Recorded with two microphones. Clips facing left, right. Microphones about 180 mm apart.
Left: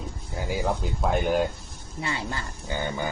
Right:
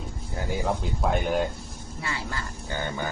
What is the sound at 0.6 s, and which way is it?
Speech, centre (ahead or behind).